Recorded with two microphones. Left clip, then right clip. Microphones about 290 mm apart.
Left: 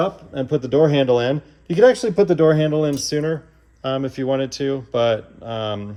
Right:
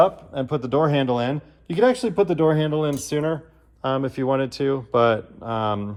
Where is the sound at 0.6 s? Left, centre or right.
Centre.